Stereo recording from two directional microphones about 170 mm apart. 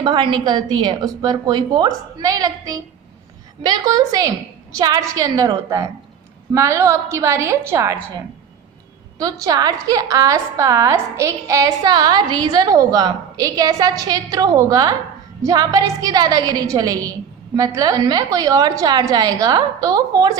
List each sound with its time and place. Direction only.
0.0 s a woman's voice: 25° right (ahead or behind)
9.1 s a woman's voice: 20° right (ahead or behind)